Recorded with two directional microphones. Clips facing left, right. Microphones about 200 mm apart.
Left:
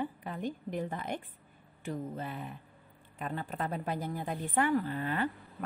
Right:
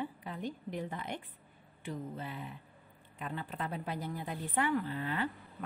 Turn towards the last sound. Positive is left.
turn(degrees=45)  # may be behind; listen again after turning